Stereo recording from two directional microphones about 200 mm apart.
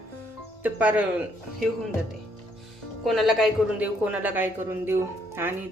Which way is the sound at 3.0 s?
Centre (ahead or behind).